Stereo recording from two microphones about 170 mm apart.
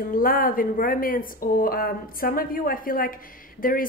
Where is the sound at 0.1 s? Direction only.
55° left (ahead or behind).